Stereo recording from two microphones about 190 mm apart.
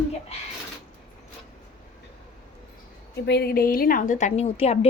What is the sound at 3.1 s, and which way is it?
A woman's voice, 60° left (ahead or behind).